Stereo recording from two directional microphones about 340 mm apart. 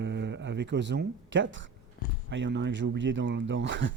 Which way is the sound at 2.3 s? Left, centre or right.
Right.